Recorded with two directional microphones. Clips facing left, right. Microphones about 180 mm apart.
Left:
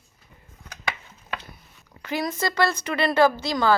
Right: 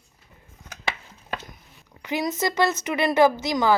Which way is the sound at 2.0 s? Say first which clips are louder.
Right 1 dB; 20° right (ahead or behind).